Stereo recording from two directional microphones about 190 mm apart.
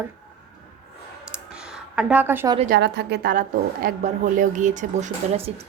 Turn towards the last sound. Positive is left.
turn(degrees=-35)  # may be behind; listen again after turning